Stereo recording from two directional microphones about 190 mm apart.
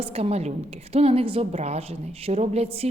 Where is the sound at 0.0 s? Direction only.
35° right (ahead or behind).